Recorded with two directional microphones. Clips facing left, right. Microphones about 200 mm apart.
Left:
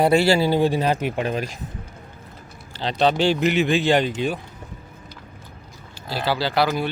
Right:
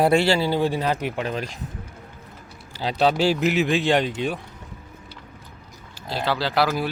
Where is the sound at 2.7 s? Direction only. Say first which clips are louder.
Left 1 dB; 10° right (ahead or behind).